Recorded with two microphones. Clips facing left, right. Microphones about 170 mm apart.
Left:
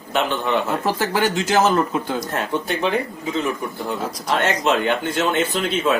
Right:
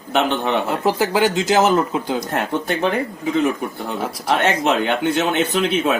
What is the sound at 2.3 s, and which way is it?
Speech, 55° right (ahead or behind).